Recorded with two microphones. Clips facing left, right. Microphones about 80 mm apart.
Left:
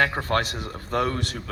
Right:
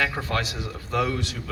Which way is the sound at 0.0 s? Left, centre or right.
Left.